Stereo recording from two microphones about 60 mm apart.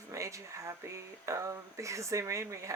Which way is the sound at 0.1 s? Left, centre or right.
Right.